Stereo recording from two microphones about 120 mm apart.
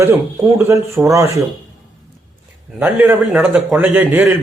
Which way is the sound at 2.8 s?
15° right (ahead or behind).